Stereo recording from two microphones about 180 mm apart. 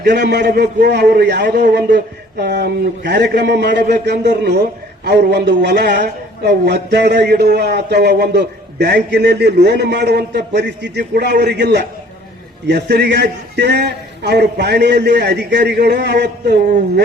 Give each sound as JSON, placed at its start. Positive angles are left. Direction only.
{"t": 0.0, "sound": "a man's voice", "side_deg": -70}